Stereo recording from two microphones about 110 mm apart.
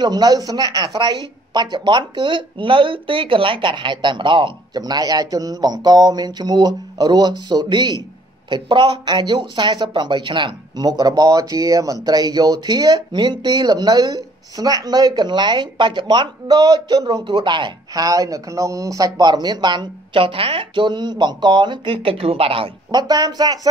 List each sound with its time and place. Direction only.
0.0 s speech: 40° right (ahead or behind); by 22.7 s 60° right (ahead or behind)
22.8 s speech: 40° right (ahead or behind)